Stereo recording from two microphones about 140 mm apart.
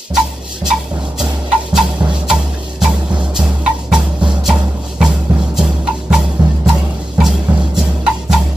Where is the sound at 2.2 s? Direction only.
5° right (ahead or behind).